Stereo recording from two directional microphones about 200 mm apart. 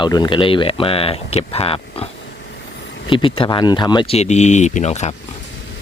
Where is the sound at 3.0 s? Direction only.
25° left (ahead or behind).